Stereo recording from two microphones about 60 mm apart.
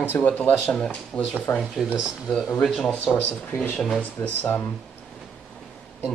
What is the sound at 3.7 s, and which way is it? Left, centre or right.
Speech, centre.